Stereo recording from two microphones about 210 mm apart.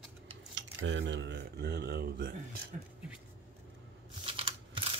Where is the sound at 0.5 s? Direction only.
60° right (ahead or behind).